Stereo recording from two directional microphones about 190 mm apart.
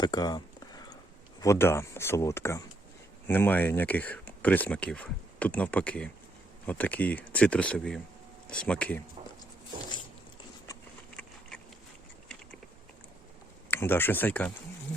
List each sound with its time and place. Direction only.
0.0 s a sound: 20° left (ahead or behind)
1.4 s speech: 15° left (ahead or behind)
11.2 s insect: 5° left (ahead or behind)
13.7 s speech: 10° left (ahead or behind)